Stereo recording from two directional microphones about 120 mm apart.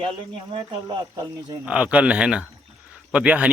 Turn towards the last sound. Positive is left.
turn(degrees=-10)  # may be behind; listen again after turning